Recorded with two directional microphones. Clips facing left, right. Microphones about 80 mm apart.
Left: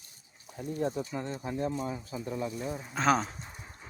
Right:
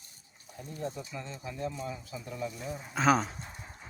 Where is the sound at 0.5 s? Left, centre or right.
Left.